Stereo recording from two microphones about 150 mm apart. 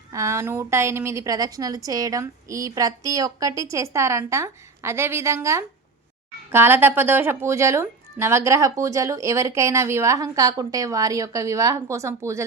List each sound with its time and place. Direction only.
0.1 s a woman's voice: 20° right (ahead or behind)